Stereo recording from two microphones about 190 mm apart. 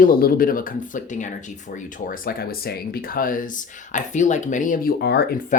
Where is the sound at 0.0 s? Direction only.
50° left (ahead or behind).